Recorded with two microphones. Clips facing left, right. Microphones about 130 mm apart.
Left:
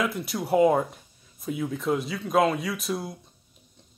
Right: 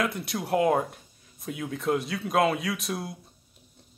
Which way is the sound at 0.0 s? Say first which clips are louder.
Left 1 dB; centre (ahead or behind).